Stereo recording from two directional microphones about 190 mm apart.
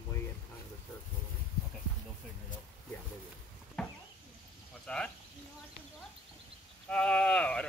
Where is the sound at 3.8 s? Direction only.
5° left (ahead or behind).